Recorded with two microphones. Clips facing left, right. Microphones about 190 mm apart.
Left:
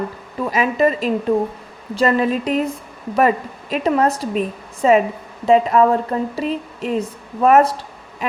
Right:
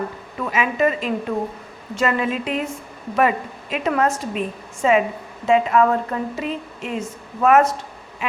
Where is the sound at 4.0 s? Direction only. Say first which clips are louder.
Left 3 dB; 35° left (ahead or behind).